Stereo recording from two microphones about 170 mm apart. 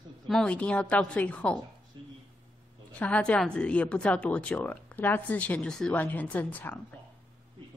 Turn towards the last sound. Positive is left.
turn(degrees=10)  # may be behind; listen again after turning